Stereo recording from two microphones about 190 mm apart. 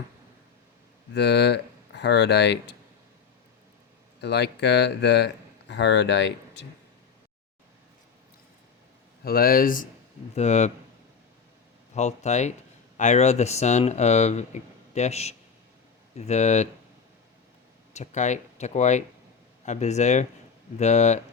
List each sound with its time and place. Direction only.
1.1 s speech: 60° left (ahead or behind)
4.2 s speech: 60° left (ahead or behind)
9.2 s speech: 50° left (ahead or behind)
10.3 s speech: 35° left (ahead or behind)
11.9 s speech: 35° left (ahead or behind)
17.9 s speech: 35° left (ahead or behind)